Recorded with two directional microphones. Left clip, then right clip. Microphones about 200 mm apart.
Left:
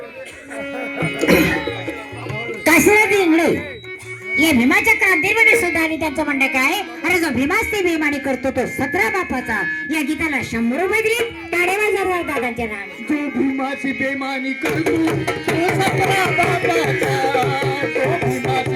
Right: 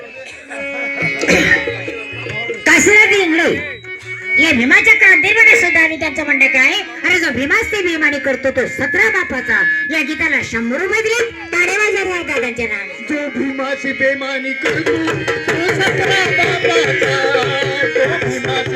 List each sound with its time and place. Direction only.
0.8 s music: 50° left (ahead or behind)
2.6 s a sound: 60° left (ahead or behind)
4.4 s a woman's voice: 55° left (ahead or behind)
10.2 s a woman's voice: 55° left (ahead or behind)